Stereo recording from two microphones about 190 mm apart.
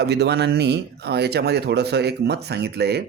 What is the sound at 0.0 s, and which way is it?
Speech, 60° right (ahead or behind).